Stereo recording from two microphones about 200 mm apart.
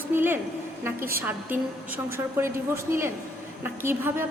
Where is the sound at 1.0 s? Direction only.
45° right (ahead or behind).